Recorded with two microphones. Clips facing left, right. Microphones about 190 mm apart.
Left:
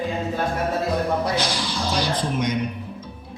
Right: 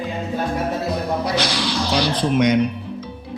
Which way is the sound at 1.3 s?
75° right (ahead or behind).